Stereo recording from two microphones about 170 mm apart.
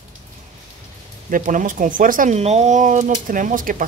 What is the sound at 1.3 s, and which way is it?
Speech, 50° right (ahead or behind).